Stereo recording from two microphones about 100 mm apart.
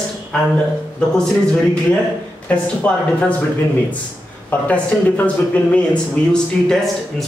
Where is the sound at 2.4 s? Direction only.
15° left (ahead or behind).